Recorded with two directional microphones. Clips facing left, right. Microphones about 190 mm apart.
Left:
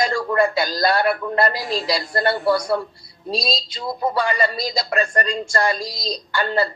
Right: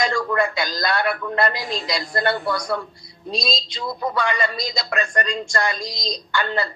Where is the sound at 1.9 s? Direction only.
30° left (ahead or behind).